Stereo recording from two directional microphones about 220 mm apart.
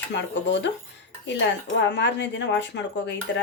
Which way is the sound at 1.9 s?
55° left (ahead or behind).